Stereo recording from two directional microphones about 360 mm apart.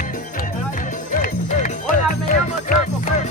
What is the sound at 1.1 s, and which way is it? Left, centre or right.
Music, left.